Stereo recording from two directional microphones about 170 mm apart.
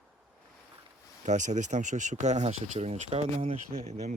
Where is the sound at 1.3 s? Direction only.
45° right (ahead or behind).